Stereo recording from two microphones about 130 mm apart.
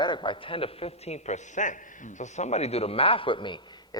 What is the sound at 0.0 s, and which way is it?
A man's voice, 40° left (ahead or behind).